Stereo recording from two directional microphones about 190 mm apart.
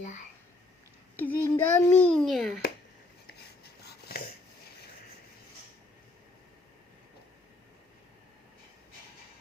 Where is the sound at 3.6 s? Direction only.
55° left (ahead or behind).